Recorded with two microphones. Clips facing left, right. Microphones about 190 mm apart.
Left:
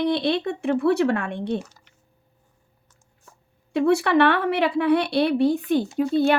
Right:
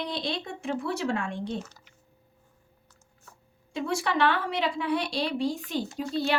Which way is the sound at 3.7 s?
60° left (ahead or behind).